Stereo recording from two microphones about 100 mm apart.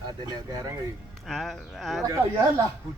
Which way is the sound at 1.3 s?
5° left (ahead or behind).